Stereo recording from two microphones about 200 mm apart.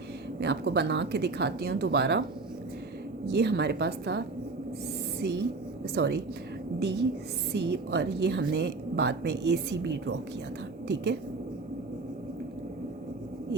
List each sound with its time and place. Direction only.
0.3 s a woman's voice: 55° right (ahead or behind)
3.2 s a woman's voice: 55° right (ahead or behind)
5.2 s a woman's voice: 55° right (ahead or behind)